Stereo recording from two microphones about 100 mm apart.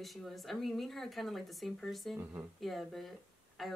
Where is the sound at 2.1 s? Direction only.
25° right (ahead or behind).